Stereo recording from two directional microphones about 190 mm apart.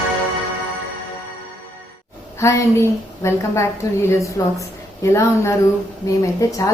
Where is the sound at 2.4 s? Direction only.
15° left (ahead or behind).